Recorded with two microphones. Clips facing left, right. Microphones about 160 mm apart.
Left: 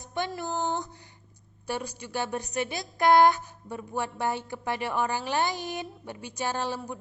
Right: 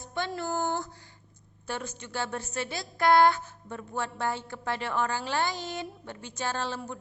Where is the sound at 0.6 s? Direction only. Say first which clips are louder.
Even; 20° left (ahead or behind).